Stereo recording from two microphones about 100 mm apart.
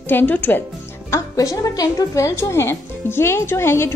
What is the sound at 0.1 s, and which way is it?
Speech, 20° left (ahead or behind).